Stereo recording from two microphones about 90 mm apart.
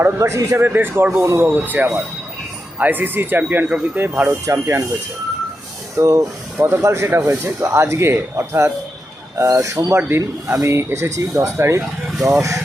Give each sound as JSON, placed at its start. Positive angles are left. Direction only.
{"t": 0.0, "sound": "speech", "side_deg": -35}
{"t": 0.7, "sound": "speech", "side_deg": -20}
{"t": 6.0, "sound": "speech", "side_deg": -35}